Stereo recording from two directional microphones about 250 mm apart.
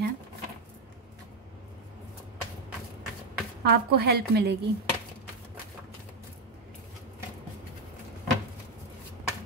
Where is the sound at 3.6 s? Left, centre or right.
Right.